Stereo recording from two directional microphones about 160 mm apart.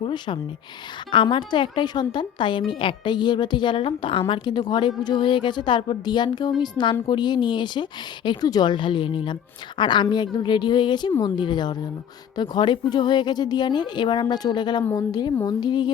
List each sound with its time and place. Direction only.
0.0 s speech: 30° left (ahead or behind)